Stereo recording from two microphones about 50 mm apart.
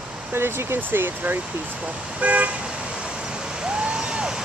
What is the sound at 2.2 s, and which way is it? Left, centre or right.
Toot, right.